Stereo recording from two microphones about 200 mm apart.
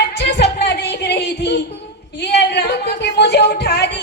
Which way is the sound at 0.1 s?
60° left (ahead or behind).